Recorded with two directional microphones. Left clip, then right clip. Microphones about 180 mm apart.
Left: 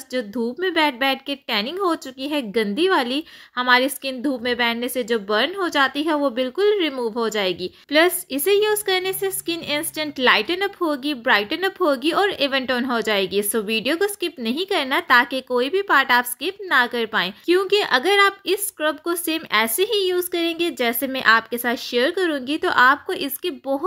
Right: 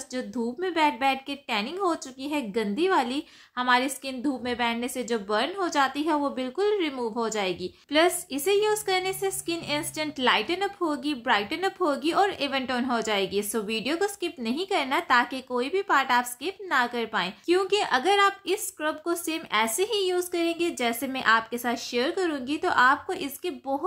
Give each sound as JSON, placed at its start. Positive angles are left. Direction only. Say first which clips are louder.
{"t": 0.1, "sound": "a woman's voice", "louder": "left 7 dB", "side_deg": 25}